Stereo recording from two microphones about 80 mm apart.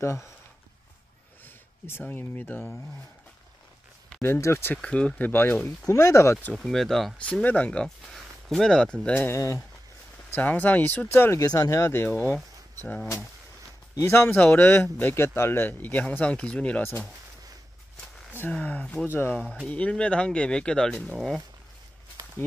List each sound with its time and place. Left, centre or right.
0.0 s speech: left
1.4 s speech: left
4.2 s speech: left
4.8 s speech: centre
5.9 s speech: left
6.5 s speech: centre
7.2 s speech: centre
8.1 s speech: centre
9.3 s speech: left
10.3 s speech: left
11.4 s speech: left
13.9 s speech: left; by 16.8 s centre
18.5 s speech: centre
19.7 s speech: centre